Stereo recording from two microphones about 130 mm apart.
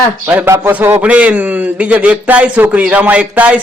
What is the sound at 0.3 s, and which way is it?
A man's voice, 15° right (ahead or behind).